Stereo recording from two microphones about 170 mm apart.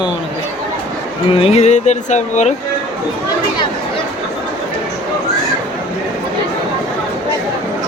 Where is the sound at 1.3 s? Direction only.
35° left (ahead or behind).